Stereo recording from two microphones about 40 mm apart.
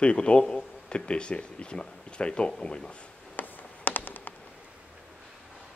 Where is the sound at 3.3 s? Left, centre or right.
Left.